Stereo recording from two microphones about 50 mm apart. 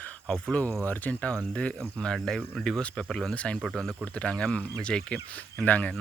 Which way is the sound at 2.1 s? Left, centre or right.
Centre.